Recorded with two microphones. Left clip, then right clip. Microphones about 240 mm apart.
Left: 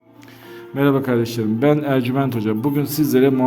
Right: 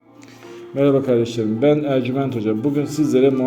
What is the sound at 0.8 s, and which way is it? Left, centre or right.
A man's voice, left.